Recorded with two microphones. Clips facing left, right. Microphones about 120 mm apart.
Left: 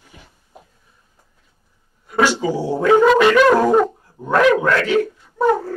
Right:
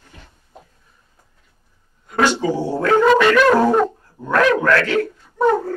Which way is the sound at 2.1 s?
10° left (ahead or behind).